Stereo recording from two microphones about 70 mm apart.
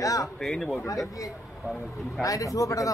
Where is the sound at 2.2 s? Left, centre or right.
Left.